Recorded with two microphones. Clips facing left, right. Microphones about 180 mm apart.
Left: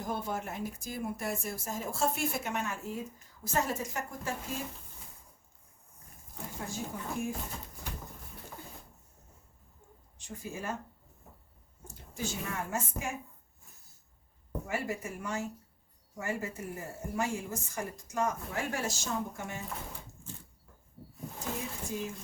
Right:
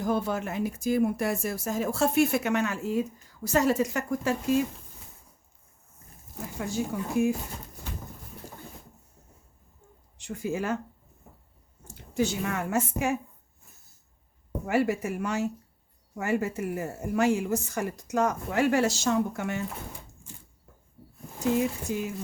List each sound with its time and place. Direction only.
0.0 s speech: 80° right
6.6 s speech: 80° right
10.2 s speech: 75° right (ahead or behind)
12.1 s speech: 75° right (ahead or behind)
14.7 s speech: 75° right (ahead or behind)
20.3 s a sound: 15° right (ahead or behind)
21.6 s speech: 75° right (ahead or behind)